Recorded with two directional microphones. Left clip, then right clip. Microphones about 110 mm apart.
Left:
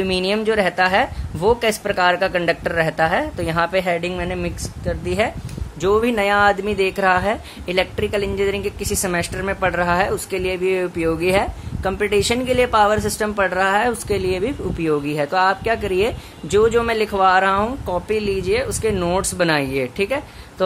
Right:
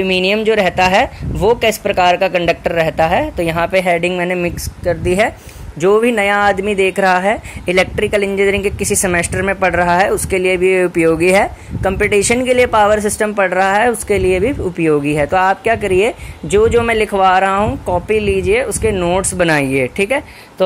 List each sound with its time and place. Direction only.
0.1 s speech: 35° right (ahead or behind)
11.0 s speech: 55° right (ahead or behind)
12.5 s speech: 40° right (ahead or behind)
18.9 s speech: 15° right (ahead or behind)
19.3 s speech: 40° right (ahead or behind)